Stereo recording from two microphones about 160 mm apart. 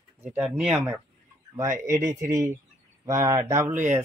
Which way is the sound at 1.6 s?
20° right (ahead or behind).